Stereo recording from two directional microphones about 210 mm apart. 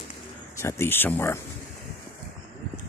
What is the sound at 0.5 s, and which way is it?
Speech, 10° left (ahead or behind).